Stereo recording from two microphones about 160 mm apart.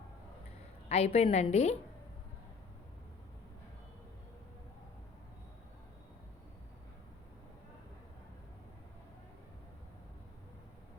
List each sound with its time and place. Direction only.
0.9 s a woman's voice: 40° left (ahead or behind)